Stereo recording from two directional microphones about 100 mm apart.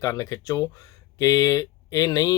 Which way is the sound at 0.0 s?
35° left (ahead or behind).